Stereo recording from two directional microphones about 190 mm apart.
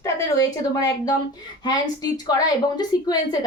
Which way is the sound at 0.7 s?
20° left (ahead or behind).